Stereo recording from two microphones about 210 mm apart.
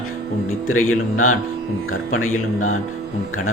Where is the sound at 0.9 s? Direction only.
90° left.